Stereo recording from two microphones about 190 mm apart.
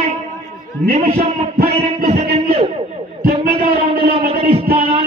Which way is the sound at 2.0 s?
35° right (ahead or behind).